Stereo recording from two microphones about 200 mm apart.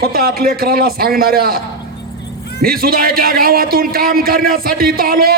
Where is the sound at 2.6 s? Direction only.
45° right (ahead or behind).